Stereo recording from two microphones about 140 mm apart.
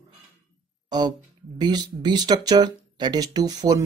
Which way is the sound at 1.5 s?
30° right (ahead or behind).